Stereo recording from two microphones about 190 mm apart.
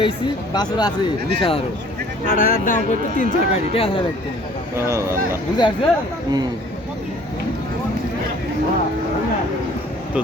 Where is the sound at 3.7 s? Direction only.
30° left (ahead or behind).